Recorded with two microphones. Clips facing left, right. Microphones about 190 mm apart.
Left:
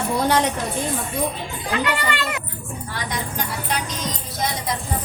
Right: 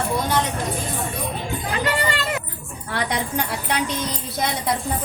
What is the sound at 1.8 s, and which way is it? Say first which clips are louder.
Children playing: right 1 dB; 35° right (ahead or behind).